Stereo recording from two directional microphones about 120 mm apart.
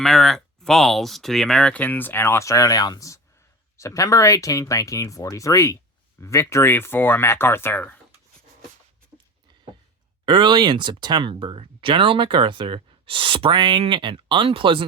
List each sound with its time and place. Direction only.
0.0 s speech: centre (ahead or behind)
10.2 s speech: 40° right (ahead or behind)